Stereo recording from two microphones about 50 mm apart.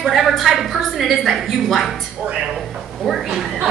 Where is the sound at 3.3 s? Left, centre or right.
Centre.